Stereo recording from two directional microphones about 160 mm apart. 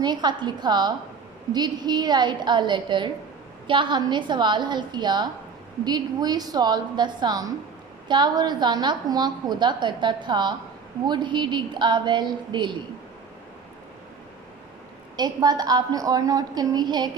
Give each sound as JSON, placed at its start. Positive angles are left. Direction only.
{"t": 0.0, "sound": "a woman's voice", "side_deg": -25}
{"t": 15.1, "sound": "a woman's voice", "side_deg": -25}